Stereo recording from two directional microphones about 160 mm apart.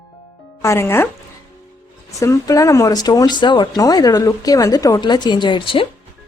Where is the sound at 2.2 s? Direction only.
20° left (ahead or behind).